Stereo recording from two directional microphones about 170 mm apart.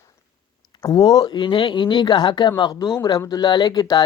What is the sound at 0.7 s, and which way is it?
Speech, 20° left (ahead or behind).